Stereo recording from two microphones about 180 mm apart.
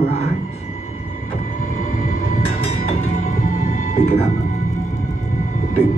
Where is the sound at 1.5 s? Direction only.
40° left (ahead or behind).